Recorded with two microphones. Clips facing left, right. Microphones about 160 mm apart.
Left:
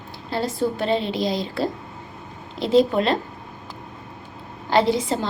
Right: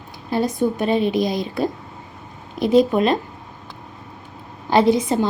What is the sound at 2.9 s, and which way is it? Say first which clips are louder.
Speech: right 3 dB; 20° right (ahead or behind).